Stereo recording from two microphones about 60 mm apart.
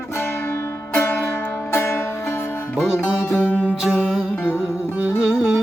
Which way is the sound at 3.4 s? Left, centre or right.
Left.